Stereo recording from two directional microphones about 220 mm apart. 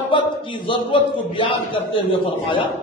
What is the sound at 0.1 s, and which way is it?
A man's voice, 20° left (ahead or behind).